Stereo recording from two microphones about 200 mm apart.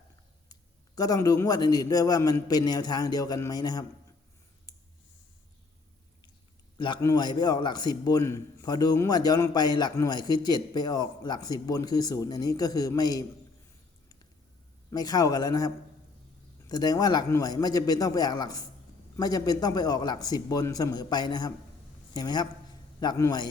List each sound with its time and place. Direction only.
0.9 s a man's voice: 20° left (ahead or behind)
4.7 s clicking: 20° left (ahead or behind)
6.7 s a man's voice: 20° left (ahead or behind)
14.8 s a man's voice: 20° left (ahead or behind)